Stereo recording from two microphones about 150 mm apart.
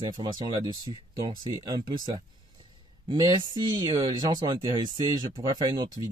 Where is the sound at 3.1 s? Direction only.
25° right (ahead or behind).